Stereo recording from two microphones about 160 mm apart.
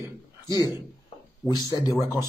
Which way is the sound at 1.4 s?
25° left (ahead or behind).